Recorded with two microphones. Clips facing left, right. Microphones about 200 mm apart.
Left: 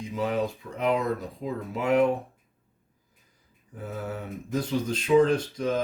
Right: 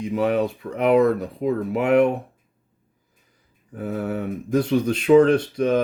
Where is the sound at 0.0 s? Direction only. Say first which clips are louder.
Right 7 dB; 65° right (ahead or behind).